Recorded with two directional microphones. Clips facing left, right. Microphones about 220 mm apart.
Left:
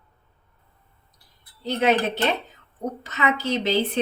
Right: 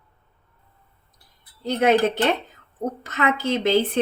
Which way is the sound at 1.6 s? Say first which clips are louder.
Right 3 dB; 50° right (ahead or behind).